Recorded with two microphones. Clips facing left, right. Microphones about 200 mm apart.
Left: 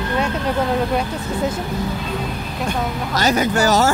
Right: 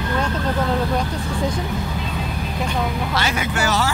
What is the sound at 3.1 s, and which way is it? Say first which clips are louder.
Speech: left 10 dB; 40° left (ahead or behind).